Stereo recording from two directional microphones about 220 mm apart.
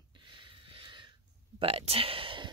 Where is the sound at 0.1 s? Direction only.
20° right (ahead or behind).